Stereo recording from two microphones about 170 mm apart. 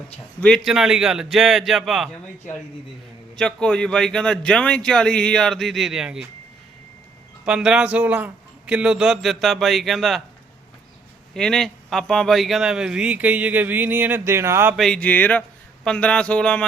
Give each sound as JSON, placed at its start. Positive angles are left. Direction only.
{"t": 0.3, "sound": "a man's voice", "side_deg": 5}
{"t": 3.3, "sound": "a man's voice", "side_deg": 5}
{"t": 7.4, "sound": "a man's voice", "side_deg": -5}
{"t": 11.3, "sound": "speech", "side_deg": 5}
{"t": 14.8, "sound": "a man's voice", "side_deg": 5}